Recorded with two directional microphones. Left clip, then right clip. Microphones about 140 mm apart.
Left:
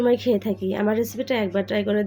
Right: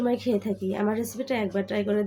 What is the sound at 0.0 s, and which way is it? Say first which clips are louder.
A woman's voice: left 6 dB; 25° left (ahead or behind).